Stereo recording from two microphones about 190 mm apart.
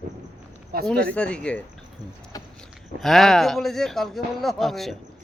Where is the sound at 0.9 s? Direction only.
5° left (ahead or behind).